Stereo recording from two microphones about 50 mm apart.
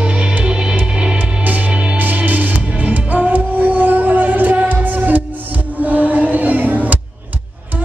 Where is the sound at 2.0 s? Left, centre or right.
Right.